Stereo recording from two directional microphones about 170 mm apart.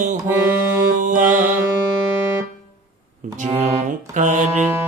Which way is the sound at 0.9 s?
50° right (ahead or behind).